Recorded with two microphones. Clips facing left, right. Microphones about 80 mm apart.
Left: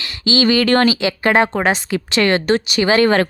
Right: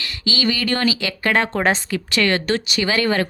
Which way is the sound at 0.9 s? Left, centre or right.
Left.